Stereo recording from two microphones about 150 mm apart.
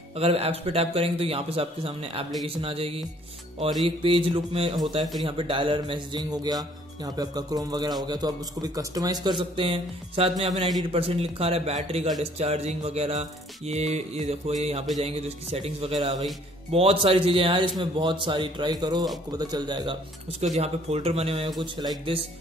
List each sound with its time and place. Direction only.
0.1 s a man's voice: 40° right (ahead or behind)
10.8 s a man's voice: 40° right (ahead or behind)
12.2 s music: 45° right (ahead or behind)
16.7 s a man's voice: 40° right (ahead or behind)
20.3 s music: 45° right (ahead or behind)